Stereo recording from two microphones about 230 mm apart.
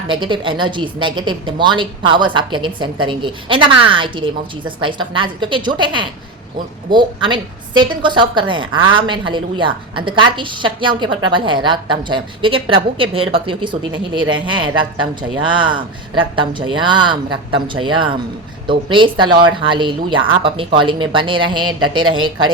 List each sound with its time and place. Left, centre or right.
0.1 s a woman's voice: right
15.6 s a woman's voice: right